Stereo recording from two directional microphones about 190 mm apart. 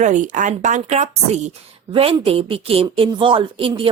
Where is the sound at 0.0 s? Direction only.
40° right (ahead or behind).